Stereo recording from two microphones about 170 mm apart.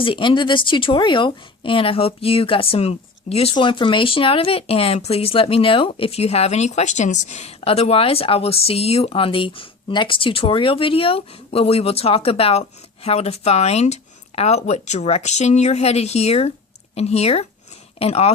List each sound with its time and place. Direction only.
0.0 s speech: 30° left (ahead or behind)